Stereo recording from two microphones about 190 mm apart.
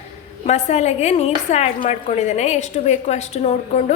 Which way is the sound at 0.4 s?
35° left (ahead or behind).